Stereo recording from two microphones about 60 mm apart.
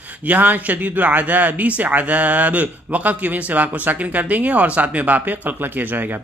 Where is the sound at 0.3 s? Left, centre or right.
Right.